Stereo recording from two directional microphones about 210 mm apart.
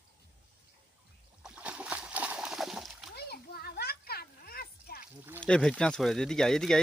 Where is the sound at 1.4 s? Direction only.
5° right (ahead or behind).